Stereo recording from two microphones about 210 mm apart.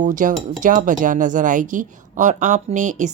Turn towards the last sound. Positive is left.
turn(degrees=-35)  # may be behind; listen again after turning